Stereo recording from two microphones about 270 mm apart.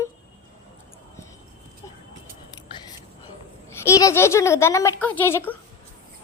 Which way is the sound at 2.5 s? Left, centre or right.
Centre.